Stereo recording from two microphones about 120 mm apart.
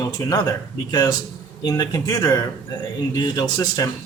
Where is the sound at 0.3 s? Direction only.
30° left (ahead or behind).